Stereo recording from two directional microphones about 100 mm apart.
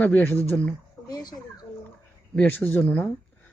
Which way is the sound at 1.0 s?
40° left (ahead or behind).